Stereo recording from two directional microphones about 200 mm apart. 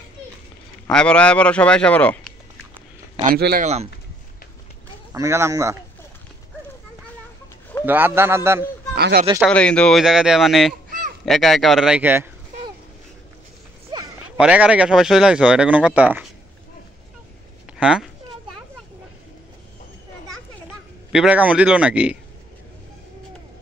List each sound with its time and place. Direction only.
0.8 s speech: 5° left (ahead or behind)
3.3 s speech: 50° right (ahead or behind)
3.6 s speech: 30° right (ahead or behind)
5.1 s a man's voice: 15° right (ahead or behind)
7.8 s a man's voice: 10° right (ahead or behind)
8.9 s speech: 50° right (ahead or behind)
9.5 s speech: 5° left (ahead or behind)
14.3 s speech: 5° right (ahead or behind)
17.7 s speech: 5° right (ahead or behind)
21.1 s speech: 5° right (ahead or behind)